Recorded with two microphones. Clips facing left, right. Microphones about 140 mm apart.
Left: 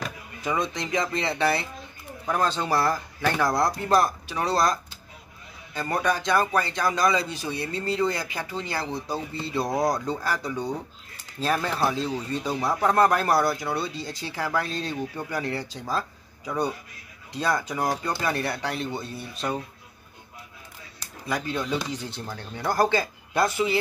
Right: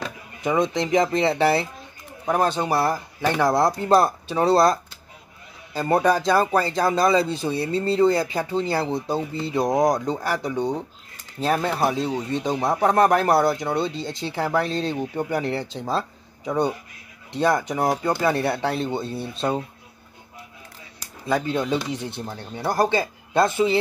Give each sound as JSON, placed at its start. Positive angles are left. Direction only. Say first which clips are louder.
{"t": 0.0, "sound": "speech", "louder": "right 4 dB", "side_deg": -25}
{"t": 21.0, "sound": "speech", "louder": "right 6 dB", "side_deg": -25}